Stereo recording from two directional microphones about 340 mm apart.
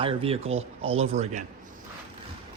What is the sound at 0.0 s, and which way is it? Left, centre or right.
Speech, centre.